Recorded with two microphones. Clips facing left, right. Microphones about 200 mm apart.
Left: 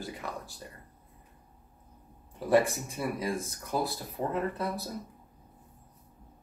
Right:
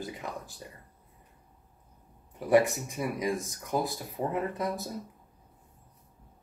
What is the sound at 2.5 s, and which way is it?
Speech, 15° right (ahead or behind).